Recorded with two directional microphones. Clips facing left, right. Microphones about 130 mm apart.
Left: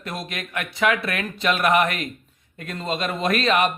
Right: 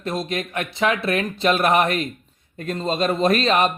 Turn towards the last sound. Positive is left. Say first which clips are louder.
# right 2 dB
turn(degrees=-30)  # may be behind; listen again after turning